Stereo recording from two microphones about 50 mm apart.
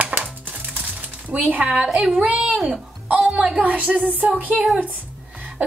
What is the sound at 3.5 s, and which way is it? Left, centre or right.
Speech, right.